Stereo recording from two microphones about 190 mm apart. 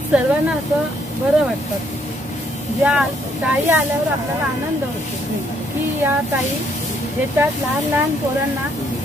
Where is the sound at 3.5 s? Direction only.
10° right (ahead or behind).